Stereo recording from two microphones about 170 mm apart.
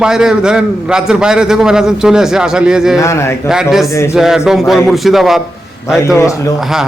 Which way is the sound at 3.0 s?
15° left (ahead or behind).